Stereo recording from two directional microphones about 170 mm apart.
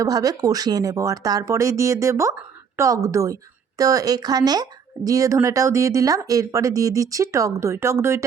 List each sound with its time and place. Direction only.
0.0 s speech: 20° right (ahead or behind)